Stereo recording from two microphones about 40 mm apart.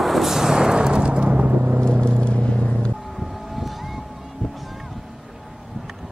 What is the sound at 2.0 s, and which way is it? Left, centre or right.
Vehicle, left.